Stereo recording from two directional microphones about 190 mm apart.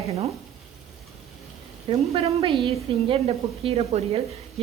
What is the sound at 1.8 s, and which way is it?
A woman's voice, 30° right (ahead or behind).